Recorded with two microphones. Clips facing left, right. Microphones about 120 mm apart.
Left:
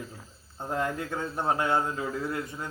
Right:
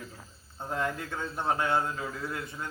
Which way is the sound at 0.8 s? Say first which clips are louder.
Left 2 dB; 15° left (ahead or behind).